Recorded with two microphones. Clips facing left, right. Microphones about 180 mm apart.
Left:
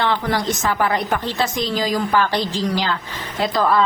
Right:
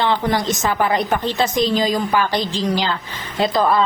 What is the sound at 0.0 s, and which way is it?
A woman's voice, 20° right (ahead or behind).